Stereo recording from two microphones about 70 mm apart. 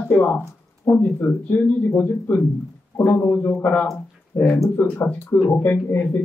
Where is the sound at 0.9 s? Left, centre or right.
Centre.